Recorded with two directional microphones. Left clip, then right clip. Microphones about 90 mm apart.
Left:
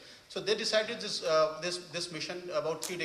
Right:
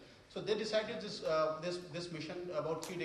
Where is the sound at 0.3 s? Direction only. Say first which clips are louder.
Left 6 dB; 35° left (ahead or behind).